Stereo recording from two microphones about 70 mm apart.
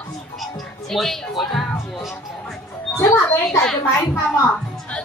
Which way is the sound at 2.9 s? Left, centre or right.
Left.